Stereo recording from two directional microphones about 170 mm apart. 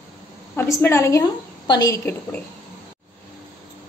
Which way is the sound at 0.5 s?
10° left (ahead or behind).